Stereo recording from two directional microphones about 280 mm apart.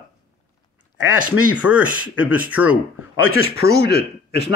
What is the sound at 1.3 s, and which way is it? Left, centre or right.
Speech, centre.